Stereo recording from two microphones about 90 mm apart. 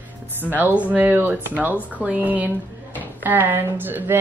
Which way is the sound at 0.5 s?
20° right (ahead or behind).